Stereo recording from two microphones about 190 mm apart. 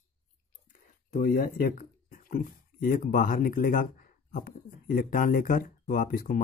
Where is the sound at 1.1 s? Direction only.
50° left (ahead or behind).